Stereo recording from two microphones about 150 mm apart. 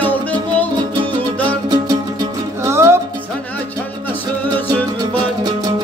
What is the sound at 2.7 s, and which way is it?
Music, 20° right (ahead or behind).